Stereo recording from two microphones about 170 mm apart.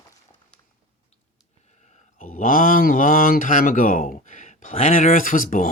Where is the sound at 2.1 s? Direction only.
50° left (ahead or behind).